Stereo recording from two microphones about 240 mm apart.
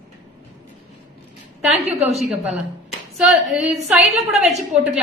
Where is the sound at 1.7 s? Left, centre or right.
Right.